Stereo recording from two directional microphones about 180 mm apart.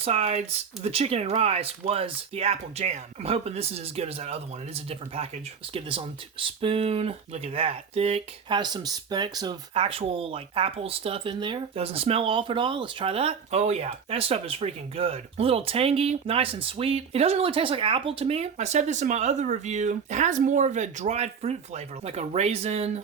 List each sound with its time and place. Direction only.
0.0 s speech: 35° right (ahead or behind)